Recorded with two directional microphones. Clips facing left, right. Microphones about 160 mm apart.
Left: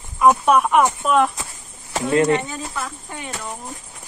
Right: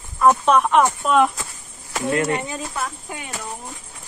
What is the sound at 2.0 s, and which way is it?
Speech, 25° left (ahead or behind).